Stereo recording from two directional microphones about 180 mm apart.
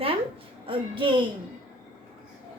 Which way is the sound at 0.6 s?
30° right (ahead or behind).